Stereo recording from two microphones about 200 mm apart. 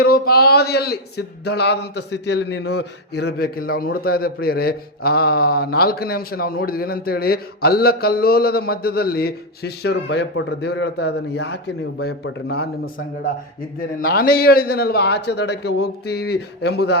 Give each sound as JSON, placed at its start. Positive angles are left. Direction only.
{"t": 0.0, "sound": "speech", "side_deg": 50}